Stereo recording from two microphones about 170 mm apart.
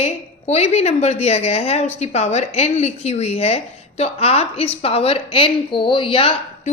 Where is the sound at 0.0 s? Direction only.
40° left (ahead or behind).